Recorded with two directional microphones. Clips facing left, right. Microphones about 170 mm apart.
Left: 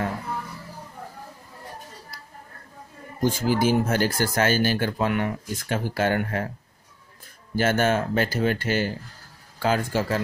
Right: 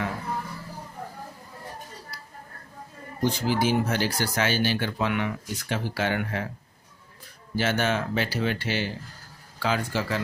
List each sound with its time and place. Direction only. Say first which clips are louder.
3.2 s speech: left 2 dB; 45° left (ahead or behind)
7.5 s speech: left 4 dB; 45° left (ahead or behind)